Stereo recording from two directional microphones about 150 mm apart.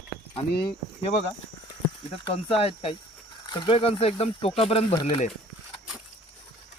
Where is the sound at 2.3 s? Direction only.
40° left (ahead or behind).